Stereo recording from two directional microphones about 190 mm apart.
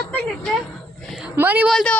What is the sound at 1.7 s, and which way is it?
Speech, centre (ahead or behind).